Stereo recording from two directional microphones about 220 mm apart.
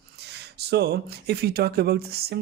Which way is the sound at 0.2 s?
50° right (ahead or behind).